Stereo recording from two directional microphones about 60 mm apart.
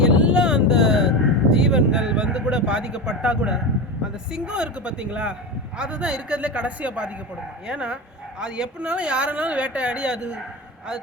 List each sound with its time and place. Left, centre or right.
0.0 s vehicle: centre
4.3 s a man's voice: centre